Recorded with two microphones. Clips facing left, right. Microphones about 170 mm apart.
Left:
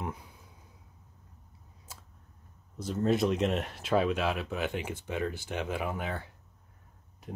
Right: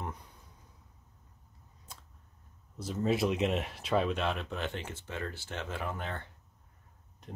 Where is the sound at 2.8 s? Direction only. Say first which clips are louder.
Left 2 dB; centre (ahead or behind).